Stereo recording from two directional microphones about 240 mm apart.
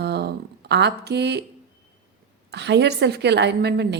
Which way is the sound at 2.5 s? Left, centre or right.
Right.